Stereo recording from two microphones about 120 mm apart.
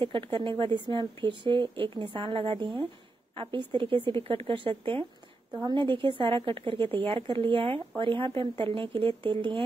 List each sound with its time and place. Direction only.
0.0 s speech: 45° right (ahead or behind)